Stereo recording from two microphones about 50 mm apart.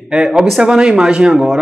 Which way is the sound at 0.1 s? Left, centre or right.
Centre.